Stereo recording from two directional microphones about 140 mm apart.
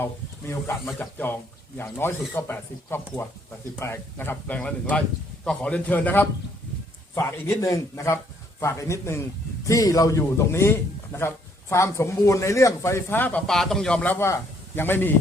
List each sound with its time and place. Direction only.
0.0 s a man's voice: 20° left (ahead or behind)